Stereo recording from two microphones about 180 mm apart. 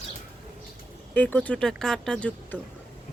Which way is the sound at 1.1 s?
10° left (ahead or behind).